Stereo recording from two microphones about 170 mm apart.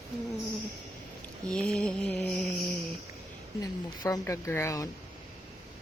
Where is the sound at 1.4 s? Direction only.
5° left (ahead or behind).